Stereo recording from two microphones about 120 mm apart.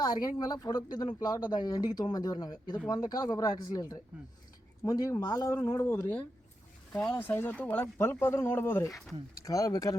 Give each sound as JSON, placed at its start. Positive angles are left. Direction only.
{"t": 0.0, "sound": "speech", "side_deg": 35}
{"t": 8.9, "sound": "speech", "side_deg": 5}
{"t": 9.5, "sound": "speech", "side_deg": 25}